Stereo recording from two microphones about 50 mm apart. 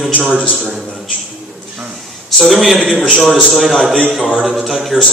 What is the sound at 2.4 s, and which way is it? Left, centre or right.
Speech, centre.